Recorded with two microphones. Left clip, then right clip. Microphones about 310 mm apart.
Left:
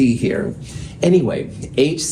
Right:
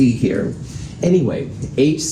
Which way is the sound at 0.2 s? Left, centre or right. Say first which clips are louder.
Right 1 dB; left.